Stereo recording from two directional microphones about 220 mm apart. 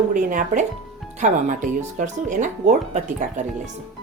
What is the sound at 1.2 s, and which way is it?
A woman's voice, 35° right (ahead or behind).